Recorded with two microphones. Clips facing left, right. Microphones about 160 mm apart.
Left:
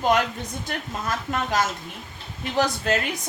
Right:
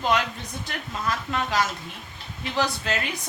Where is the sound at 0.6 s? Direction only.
45° left (ahead or behind).